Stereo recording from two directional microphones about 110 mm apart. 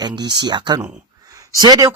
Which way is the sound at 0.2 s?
40° right (ahead or behind).